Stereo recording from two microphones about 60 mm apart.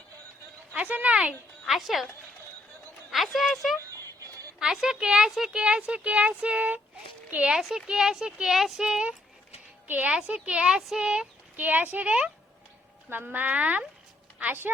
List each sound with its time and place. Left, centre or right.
0.7 s a woman's voice: right
1.6 s speech: centre
3.1 s speech: centre
3.8 s a sound: right
4.6 s speech: centre; by 7.5 s right
7.5 s speech: centre
9.8 s a woman's voice: right
10.1 s speech: centre
11.5 s a woman's voice: right